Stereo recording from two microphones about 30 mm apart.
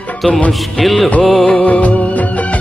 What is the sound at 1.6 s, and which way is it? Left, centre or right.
Music, left.